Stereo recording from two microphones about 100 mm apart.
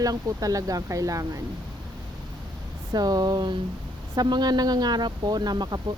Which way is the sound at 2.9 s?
40° right (ahead or behind).